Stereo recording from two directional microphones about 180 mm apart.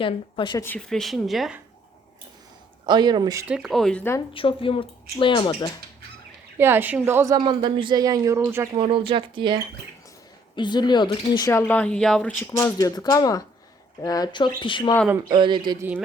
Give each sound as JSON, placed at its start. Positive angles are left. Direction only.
{"t": 0.0, "sound": "speech", "side_deg": 25}
{"t": 0.6, "sound": "speech", "side_deg": 5}
{"t": 2.8, "sound": "speech", "side_deg": -25}
{"t": 3.4, "sound": "speech", "side_deg": -5}
{"t": 4.4, "sound": "speech", "side_deg": 30}
{"t": 6.6, "sound": "speech", "side_deg": -10}
{"t": 8.7, "sound": "speech", "side_deg": -30}
{"t": 10.5, "sound": "speech", "side_deg": 25}
{"t": 15.3, "sound": "speech", "side_deg": -25}
{"t": 15.8, "sound": "speech", "side_deg": -10}